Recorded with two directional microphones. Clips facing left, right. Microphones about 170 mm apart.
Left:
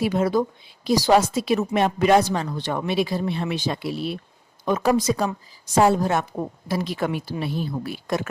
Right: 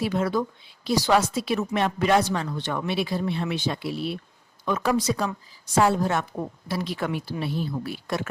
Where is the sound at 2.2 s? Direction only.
40° left (ahead or behind).